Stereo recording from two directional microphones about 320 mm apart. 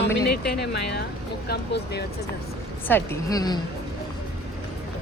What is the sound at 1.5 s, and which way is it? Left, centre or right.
Speech, left.